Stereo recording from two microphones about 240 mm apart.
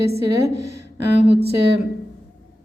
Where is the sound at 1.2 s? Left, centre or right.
Right.